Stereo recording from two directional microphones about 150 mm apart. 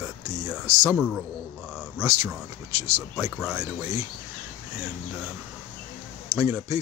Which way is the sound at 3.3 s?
5° right (ahead or behind).